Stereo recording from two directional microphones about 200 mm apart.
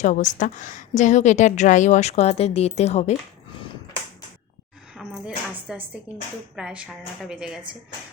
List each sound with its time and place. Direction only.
0.0 s a woman's voice: 35° left (ahead or behind)
4.9 s a woman's voice: centre (ahead or behind)